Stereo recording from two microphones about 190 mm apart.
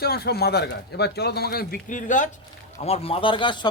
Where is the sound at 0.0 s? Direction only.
55° left (ahead or behind).